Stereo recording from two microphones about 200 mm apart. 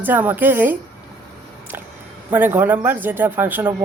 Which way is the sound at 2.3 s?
10° right (ahead or behind).